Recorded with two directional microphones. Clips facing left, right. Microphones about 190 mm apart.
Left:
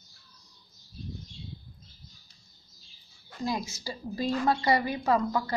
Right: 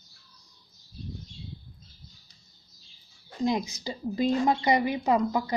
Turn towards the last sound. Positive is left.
turn(degrees=-15)  # may be behind; listen again after turning